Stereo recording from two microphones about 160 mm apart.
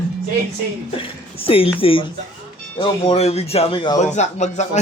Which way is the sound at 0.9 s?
35° left (ahead or behind).